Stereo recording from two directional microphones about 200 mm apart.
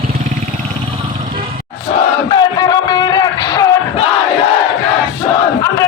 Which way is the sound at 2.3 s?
20° left (ahead or behind).